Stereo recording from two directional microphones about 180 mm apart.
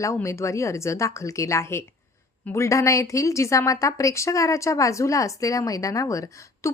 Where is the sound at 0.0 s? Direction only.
15° left (ahead or behind).